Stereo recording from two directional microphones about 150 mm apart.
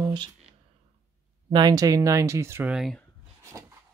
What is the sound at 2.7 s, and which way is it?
Speech, centre (ahead or behind).